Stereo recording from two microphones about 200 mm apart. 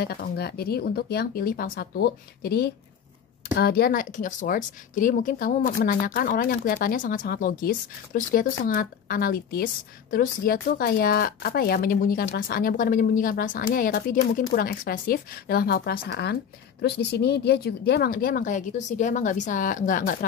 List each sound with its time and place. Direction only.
0.0 s speech: 50° left (ahead or behind)